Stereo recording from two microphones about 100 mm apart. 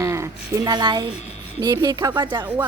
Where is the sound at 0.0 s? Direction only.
25° right (ahead or behind).